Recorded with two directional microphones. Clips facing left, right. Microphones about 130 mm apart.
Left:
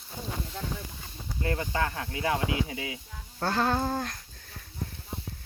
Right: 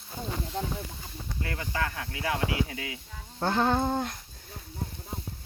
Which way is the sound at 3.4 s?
20° right (ahead or behind).